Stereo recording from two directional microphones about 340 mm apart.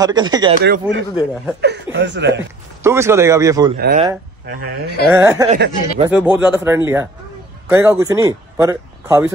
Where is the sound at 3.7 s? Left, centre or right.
Right.